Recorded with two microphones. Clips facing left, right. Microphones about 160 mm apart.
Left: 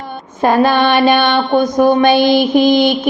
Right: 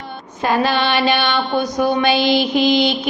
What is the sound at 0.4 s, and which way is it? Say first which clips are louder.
Mantra: left 6 dB; 50° left (ahead or behind).